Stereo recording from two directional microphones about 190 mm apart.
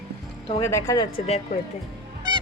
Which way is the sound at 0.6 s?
15° left (ahead or behind).